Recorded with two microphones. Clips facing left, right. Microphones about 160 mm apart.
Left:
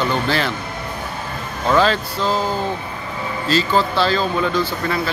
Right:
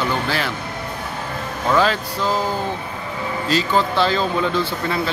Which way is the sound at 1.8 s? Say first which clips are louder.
Left 2 dB; 10° right (ahead or behind).